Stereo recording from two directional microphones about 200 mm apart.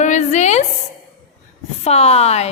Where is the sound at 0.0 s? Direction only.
35° left (ahead or behind).